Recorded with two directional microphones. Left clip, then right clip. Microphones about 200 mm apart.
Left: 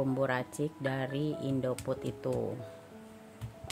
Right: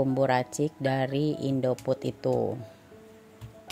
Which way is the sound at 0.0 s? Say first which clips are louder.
Right 7 dB; 25° right (ahead or behind).